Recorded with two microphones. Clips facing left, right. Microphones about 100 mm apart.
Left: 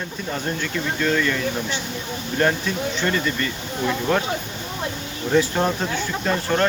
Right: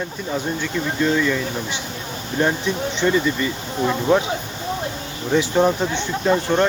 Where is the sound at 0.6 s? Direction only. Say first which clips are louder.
Right 2 dB; 15° right (ahead or behind).